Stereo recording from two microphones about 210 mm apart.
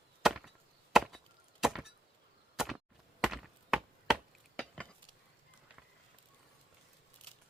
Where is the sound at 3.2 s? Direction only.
Centre (ahead or behind).